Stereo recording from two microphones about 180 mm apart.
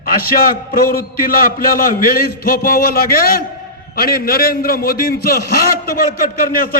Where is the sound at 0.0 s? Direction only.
55° left (ahead or behind).